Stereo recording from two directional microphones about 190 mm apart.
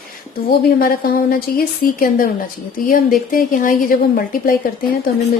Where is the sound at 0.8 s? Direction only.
50° left (ahead or behind).